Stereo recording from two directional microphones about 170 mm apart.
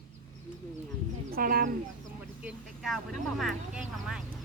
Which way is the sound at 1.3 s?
60° right (ahead or behind).